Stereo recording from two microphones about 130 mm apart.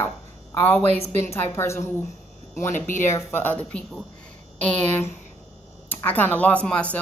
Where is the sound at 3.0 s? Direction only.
20° left (ahead or behind).